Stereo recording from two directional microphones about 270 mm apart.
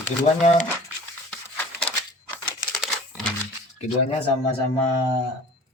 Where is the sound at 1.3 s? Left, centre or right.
Centre.